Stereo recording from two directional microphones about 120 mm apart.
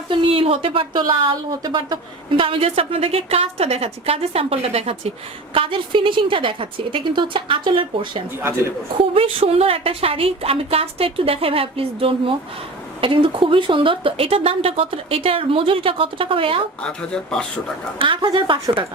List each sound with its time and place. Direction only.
0.1 s speech: 50° right (ahead or behind)
5.5 s speech: 45° right (ahead or behind)
16.8 s speech: 10° left (ahead or behind)
18.0 s speech: 45° right (ahead or behind)